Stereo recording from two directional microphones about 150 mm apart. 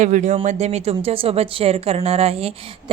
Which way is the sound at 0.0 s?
55° right (ahead or behind).